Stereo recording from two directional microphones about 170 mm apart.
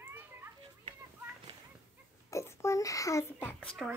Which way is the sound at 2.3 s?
15° left (ahead or behind).